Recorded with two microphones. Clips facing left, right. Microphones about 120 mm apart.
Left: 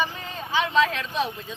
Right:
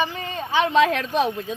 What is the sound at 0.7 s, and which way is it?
Speech, 45° right (ahead or behind).